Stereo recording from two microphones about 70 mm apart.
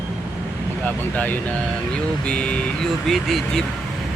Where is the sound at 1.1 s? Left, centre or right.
Left.